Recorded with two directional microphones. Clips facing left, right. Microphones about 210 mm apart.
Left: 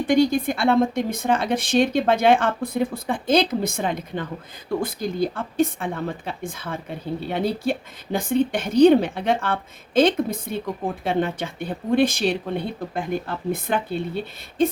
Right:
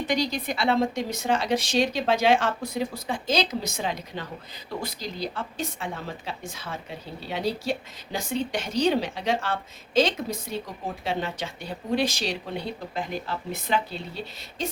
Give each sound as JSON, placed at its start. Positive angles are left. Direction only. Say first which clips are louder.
{"t": 0.0, "sound": "a woman's voice", "louder": "left 8 dB", "side_deg": 50}